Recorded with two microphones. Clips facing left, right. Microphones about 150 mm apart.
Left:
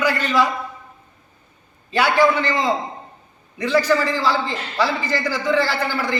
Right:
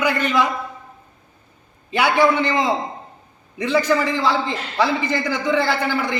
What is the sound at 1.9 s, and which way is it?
A man's voice, 20° right (ahead or behind).